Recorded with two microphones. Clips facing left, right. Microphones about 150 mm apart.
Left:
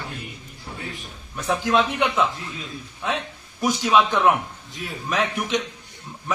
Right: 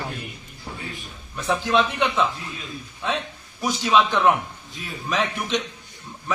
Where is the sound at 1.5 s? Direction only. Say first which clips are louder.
Even; 5° left (ahead or behind).